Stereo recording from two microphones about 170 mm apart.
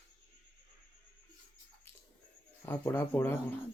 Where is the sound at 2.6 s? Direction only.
15° left (ahead or behind).